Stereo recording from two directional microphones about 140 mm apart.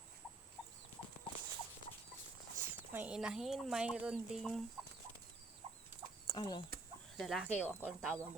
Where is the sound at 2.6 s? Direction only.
15° right (ahead or behind).